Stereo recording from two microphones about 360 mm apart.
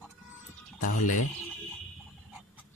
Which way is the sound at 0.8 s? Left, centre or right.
Left.